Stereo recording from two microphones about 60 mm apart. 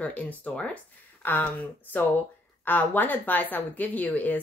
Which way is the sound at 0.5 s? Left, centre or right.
Centre.